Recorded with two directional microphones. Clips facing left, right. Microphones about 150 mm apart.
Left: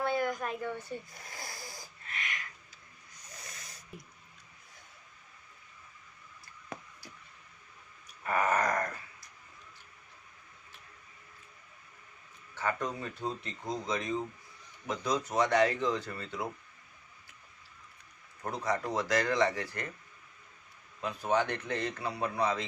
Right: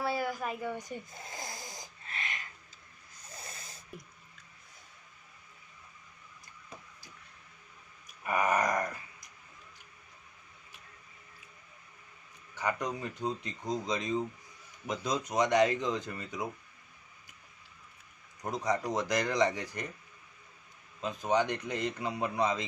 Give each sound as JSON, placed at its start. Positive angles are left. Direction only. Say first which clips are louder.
{"t": 0.0, "sound": "a sound", "louder": "left 2 dB", "side_deg": -5}
{"t": 8.0, "sound": "groan", "louder": "even", "side_deg": -15}
{"t": 12.5, "sound": "speech", "louder": "even", "side_deg": -15}
{"t": 18.4, "sound": "speech", "louder": "right 1 dB", "side_deg": -20}
{"t": 21.0, "sound": "speech", "louder": "right 1 dB", "side_deg": -20}